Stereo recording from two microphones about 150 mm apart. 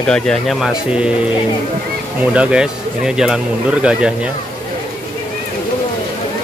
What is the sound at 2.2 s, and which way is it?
Speech, 10° right (ahead or behind).